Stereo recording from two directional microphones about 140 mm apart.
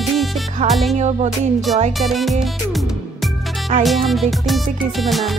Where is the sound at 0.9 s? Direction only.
55° right (ahead or behind).